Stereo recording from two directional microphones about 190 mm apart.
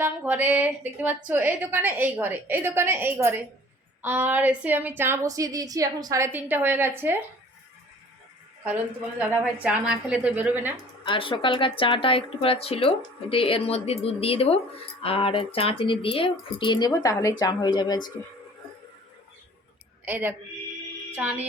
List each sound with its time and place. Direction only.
0.0 s a woman's voice: 10° right (ahead or behind)
8.6 s a woman's voice: 10° right (ahead or behind)
11.0 s a woman's voice: 25° left (ahead or behind)
20.1 s a woman's voice: 10° right (ahead or behind)